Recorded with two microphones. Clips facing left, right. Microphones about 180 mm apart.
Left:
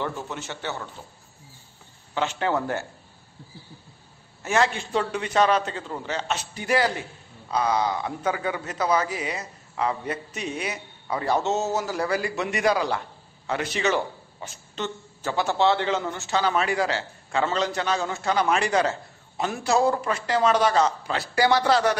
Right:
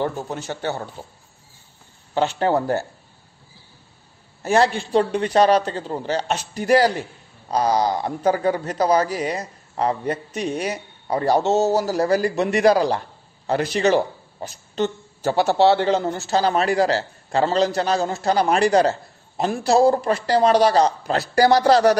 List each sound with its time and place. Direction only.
0.0 s a man's voice: 40° right (ahead or behind)
2.1 s a man's voice: 35° right (ahead or behind)
4.4 s a man's voice: 35° right (ahead or behind)